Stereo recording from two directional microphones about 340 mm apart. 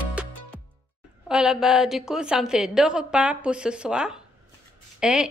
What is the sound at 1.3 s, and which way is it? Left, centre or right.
A woman's voice, centre.